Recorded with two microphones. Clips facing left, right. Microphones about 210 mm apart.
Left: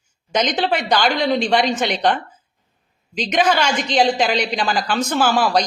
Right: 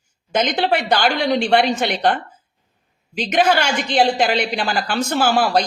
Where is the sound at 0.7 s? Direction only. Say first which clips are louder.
Right 2 dB; 60° right (ahead or behind).